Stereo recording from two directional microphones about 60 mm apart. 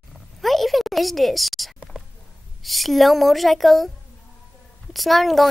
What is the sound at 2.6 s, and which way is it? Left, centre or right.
A woman's voice, centre.